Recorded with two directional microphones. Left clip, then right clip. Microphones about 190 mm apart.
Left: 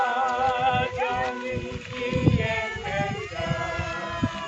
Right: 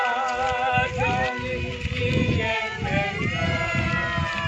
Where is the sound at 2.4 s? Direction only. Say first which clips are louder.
Right 2 dB; 60° right (ahead or behind).